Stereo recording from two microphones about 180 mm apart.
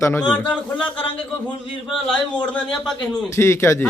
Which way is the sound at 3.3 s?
15° left (ahead or behind).